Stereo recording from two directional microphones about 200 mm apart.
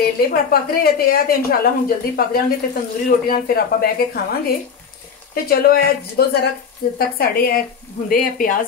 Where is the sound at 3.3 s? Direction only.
50° left (ahead or behind).